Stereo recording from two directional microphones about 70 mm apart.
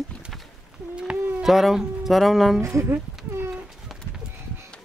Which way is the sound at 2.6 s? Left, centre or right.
Right.